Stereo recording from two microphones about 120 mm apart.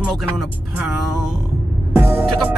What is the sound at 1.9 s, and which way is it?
Music, 15° right (ahead or behind).